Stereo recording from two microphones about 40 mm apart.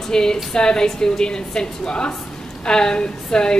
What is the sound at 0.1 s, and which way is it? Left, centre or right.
A woman's voice, centre.